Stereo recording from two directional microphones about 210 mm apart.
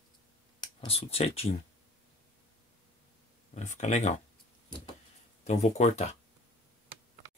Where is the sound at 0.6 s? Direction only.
25° left (ahead or behind).